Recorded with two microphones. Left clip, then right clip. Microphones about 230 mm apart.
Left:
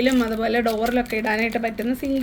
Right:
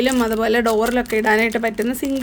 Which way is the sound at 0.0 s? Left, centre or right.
Right.